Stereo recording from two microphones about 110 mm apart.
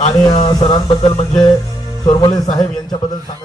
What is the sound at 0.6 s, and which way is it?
A man's voice, 50° left (ahead or behind).